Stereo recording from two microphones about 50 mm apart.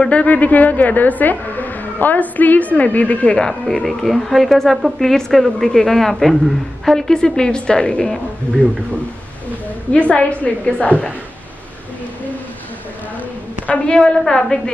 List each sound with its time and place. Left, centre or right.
0.0 s a woman's voice: left
3.3 s a woman's voice: centre
9.9 s a woman's voice: left
13.7 s a woman's voice: centre